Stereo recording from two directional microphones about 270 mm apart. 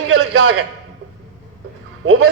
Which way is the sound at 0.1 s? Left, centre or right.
Right.